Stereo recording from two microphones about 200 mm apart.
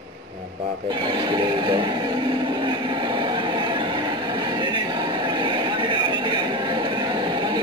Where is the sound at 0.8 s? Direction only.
20° right (ahead or behind).